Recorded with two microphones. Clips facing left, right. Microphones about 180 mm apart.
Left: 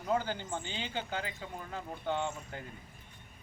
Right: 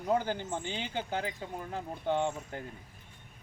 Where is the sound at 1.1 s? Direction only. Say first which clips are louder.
Right 3 dB; 45° right (ahead or behind).